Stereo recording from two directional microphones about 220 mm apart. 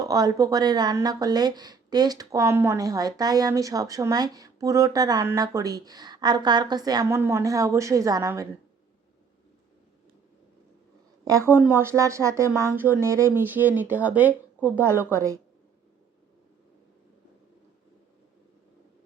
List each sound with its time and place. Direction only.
0.0 s speech: 15° right (ahead or behind)
11.3 s speech: 10° right (ahead or behind)